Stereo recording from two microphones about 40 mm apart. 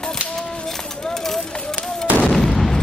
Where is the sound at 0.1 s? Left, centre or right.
Centre.